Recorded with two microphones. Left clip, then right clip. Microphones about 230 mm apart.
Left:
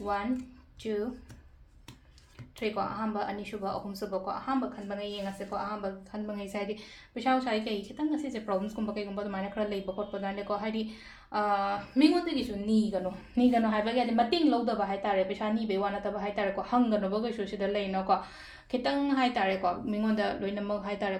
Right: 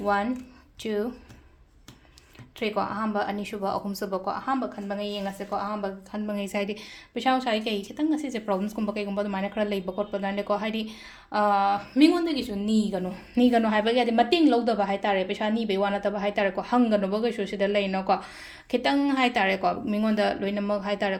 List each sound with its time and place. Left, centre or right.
0.8 s speech: right
2.6 s a woman's voice: right